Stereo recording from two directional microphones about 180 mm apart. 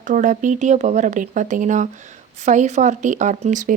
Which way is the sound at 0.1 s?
45° right (ahead or behind).